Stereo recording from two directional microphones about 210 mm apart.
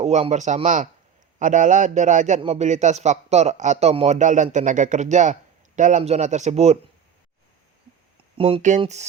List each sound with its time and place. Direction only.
0.0 s a man's voice: 30° right (ahead or behind)
8.4 s a man's voice: 25° right (ahead or behind)